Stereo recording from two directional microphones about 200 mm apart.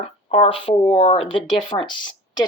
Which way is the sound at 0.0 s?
30° left (ahead or behind).